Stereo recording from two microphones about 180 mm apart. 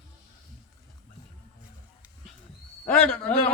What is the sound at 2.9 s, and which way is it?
Speech, 5° left (ahead or behind).